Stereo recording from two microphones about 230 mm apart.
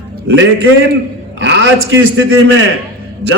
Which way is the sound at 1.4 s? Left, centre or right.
Right.